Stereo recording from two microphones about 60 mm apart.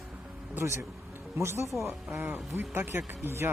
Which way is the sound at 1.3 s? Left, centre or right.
Right.